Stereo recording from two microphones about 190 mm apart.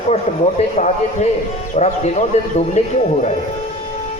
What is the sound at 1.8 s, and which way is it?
A man's voice, 35° left (ahead or behind).